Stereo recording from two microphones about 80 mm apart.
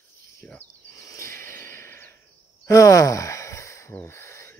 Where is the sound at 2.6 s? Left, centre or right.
Left.